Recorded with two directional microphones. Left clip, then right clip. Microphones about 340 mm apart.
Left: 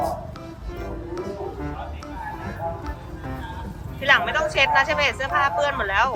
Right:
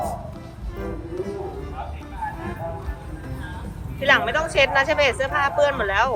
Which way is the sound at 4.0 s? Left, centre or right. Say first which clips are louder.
Even; centre.